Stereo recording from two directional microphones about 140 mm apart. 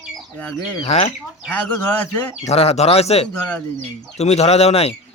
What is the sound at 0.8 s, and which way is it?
Speech, 50° left (ahead or behind).